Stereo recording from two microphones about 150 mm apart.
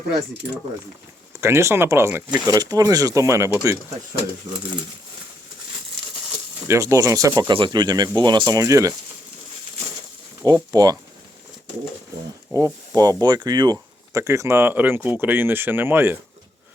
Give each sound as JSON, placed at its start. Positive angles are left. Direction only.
{"t": 1.4, "sound": "speech", "side_deg": -15}
{"t": 6.7, "sound": "speech", "side_deg": -20}
{"t": 10.4, "sound": "speech", "side_deg": -25}
{"t": 12.5, "sound": "speech", "side_deg": -25}